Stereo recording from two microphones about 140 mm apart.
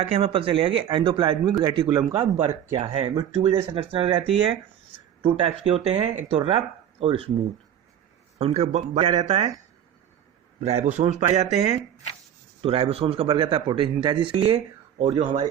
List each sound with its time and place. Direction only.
0.0 s speech: 40° right (ahead or behind)
5.2 s speech: 40° right (ahead or behind)
8.4 s speech: 50° right (ahead or behind)
10.6 s a man's voice: 55° right (ahead or behind); by 15.2 s 35° right (ahead or behind)
15.2 s a man's voice: 60° right (ahead or behind)